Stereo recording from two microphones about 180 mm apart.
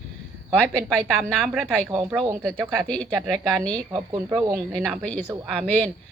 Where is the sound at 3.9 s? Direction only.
25° right (ahead or behind).